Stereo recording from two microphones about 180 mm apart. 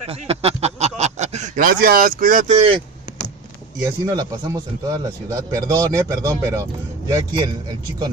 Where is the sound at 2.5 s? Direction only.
30° right (ahead or behind).